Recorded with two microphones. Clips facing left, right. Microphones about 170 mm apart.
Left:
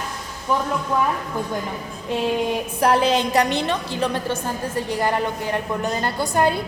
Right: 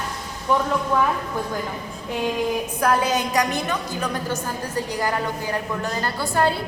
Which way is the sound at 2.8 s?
30° left (ahead or behind).